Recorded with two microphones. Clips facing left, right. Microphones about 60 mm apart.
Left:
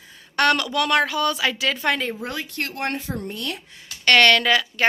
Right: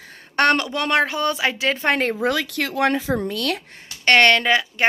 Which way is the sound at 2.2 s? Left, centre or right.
Right.